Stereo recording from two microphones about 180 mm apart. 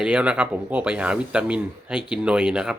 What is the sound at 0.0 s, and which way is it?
Speech, 5° right (ahead or behind).